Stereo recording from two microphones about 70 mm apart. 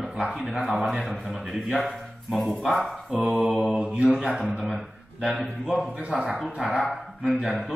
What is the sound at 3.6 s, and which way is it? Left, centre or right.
Speech, centre.